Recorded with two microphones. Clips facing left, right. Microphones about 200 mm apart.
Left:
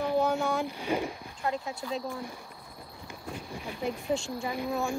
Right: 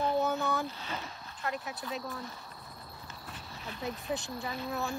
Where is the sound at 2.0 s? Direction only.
15° left (ahead or behind).